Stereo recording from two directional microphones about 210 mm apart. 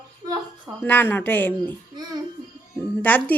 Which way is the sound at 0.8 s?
10° left (ahead or behind).